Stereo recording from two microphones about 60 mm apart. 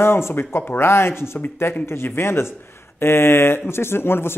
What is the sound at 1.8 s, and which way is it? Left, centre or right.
Speech, left.